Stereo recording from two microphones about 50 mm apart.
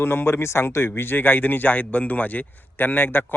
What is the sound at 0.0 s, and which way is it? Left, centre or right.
A man's voice, left.